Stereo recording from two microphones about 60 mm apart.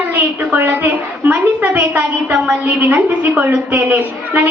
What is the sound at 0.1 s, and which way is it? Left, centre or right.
A woman's voice, right.